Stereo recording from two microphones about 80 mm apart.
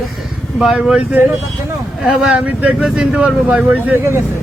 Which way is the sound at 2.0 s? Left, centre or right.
Centre.